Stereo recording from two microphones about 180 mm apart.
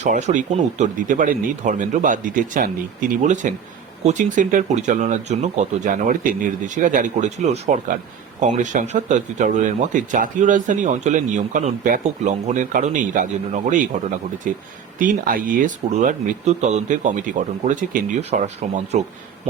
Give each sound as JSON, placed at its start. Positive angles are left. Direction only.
{"t": 0.0, "sound": "speech", "side_deg": -40}